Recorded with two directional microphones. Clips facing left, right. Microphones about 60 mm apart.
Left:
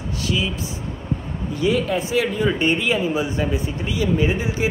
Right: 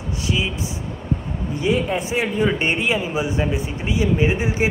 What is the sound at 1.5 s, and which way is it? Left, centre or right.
Speech, right.